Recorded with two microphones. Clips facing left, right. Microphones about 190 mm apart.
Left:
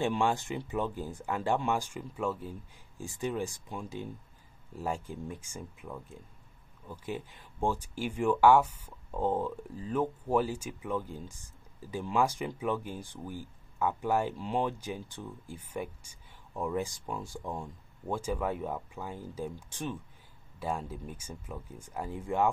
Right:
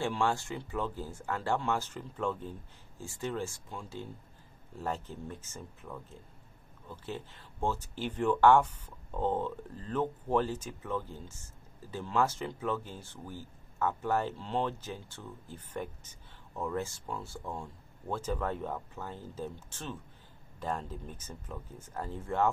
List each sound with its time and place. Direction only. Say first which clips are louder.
0.0 s speech: left 2 dB; 15° left (ahead or behind)